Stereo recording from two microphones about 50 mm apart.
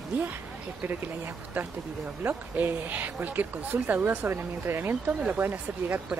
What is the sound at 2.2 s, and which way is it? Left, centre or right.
Speech, right.